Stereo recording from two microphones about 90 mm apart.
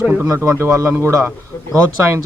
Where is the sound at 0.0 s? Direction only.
15° right (ahead or behind).